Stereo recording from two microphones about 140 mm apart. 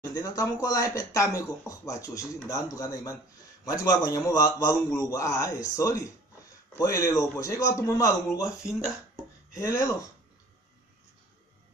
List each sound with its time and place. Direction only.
0.1 s speech: 25° left (ahead or behind)
8.5 s speech: 5° right (ahead or behind)
9.5 s speech: 20° left (ahead or behind)